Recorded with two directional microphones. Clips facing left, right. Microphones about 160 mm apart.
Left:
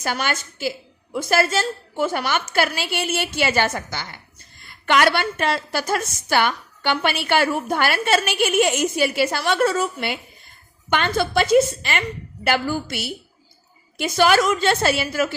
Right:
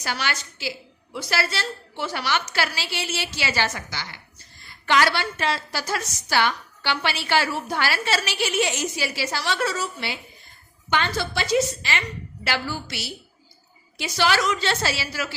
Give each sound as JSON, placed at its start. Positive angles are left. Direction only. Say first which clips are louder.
{"t": 0.0, "sound": "a woman's voice", "louder": "left 4 dB", "side_deg": 50}